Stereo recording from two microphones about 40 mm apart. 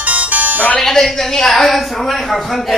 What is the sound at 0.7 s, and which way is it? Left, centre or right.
A woman's voice, centre.